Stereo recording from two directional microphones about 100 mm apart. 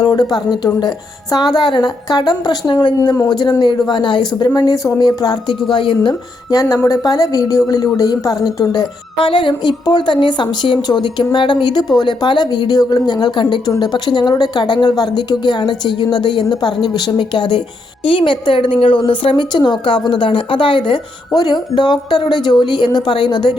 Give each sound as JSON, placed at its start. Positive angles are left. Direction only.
{"t": 0.0, "sound": "a woman's voice", "side_deg": 45}
{"t": 5.7, "sound": "a woman's voice", "side_deg": 55}
{"t": 6.5, "sound": "speech", "side_deg": 35}
{"t": 9.1, "sound": "a woman's voice", "side_deg": 55}